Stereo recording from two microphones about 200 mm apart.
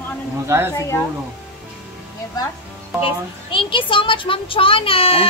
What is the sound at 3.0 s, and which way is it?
A child's voice, 25° left (ahead or behind).